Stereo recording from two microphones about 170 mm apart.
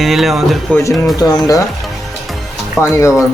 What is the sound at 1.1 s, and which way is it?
Speech, 20° left (ahead or behind).